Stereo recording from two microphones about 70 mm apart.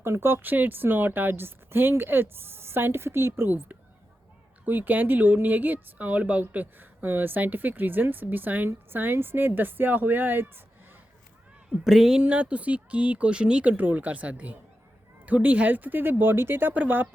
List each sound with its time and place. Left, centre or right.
0.0 s speech: right
11.9 s speech: centre
12.2 s speech: centre